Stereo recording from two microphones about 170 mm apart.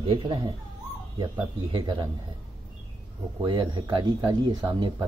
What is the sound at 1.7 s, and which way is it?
Speech, 30° right (ahead or behind).